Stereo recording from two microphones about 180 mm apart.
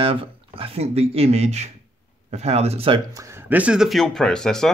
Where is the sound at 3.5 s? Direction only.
5° right (ahead or behind).